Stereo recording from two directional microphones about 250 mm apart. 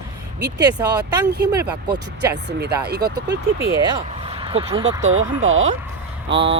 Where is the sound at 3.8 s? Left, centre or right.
Centre.